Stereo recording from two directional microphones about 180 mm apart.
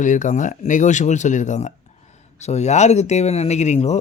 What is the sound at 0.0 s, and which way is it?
Speech, 45° left (ahead or behind).